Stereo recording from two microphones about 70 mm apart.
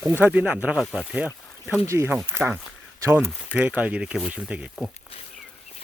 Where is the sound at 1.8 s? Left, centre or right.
Right.